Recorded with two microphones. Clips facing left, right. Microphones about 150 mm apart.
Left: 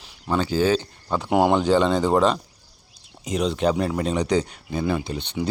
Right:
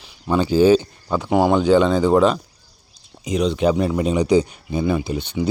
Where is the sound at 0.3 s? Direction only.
15° right (ahead or behind).